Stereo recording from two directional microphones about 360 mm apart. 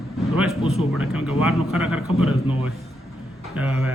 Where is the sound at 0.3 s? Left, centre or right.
Centre.